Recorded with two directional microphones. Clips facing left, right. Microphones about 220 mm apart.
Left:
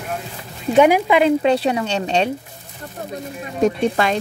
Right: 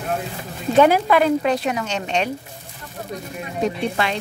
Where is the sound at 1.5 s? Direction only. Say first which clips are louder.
Left 4 dB; 30° left (ahead or behind).